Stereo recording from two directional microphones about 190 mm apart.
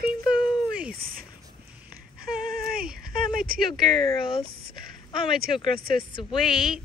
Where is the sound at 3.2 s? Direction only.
50° right (ahead or behind).